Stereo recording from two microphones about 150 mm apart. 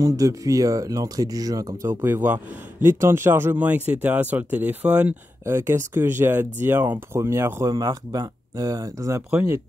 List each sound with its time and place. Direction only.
0.0 s speech: 20° right (ahead or behind)